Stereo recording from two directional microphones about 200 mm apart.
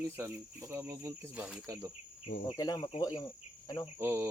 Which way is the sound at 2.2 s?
35° left (ahead or behind).